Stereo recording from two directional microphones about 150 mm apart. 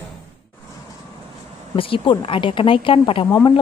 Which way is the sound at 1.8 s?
35° left (ahead or behind).